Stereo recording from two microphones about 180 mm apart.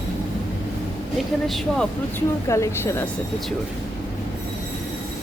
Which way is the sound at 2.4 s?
15° left (ahead or behind).